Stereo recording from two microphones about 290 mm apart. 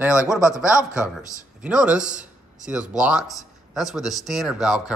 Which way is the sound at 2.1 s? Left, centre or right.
Right.